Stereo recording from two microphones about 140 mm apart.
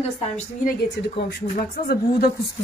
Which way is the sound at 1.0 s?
90° left.